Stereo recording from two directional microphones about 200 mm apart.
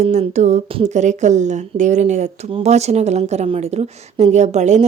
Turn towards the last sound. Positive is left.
turn(degrees=-35)  # may be behind; listen again after turning